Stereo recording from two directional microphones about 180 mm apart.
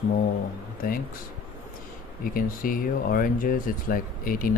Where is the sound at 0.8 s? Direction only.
50° left (ahead or behind).